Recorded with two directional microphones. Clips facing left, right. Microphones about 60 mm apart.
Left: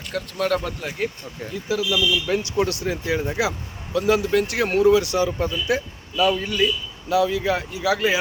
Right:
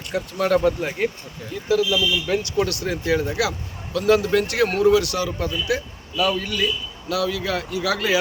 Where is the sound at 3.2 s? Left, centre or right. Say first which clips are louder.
Even; left.